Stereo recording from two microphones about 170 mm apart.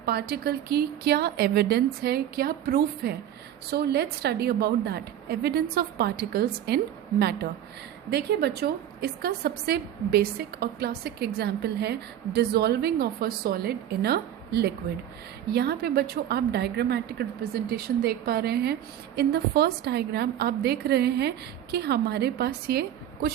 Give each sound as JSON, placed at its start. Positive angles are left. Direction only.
{"t": 0.0, "sound": "a woman's voice", "side_deg": -65}